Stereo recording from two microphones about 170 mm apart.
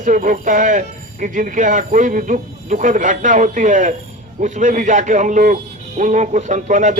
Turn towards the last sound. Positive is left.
turn(degrees=-45)  # may be behind; listen again after turning